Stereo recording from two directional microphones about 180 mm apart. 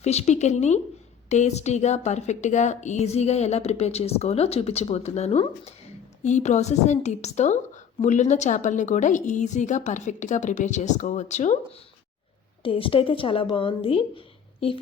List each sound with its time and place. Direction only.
0.0 s a woman's voice: 35° left (ahead or behind)
12.6 s a woman's voice: 30° left (ahead or behind)